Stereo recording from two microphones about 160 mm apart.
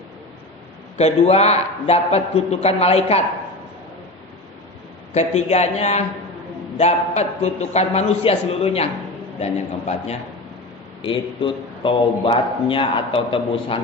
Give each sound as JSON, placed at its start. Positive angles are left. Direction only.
{"t": 0.9, "sound": "speech", "side_deg": 40}
{"t": 5.1, "sound": "a man's voice", "side_deg": 45}
{"t": 11.0, "sound": "speech", "side_deg": 30}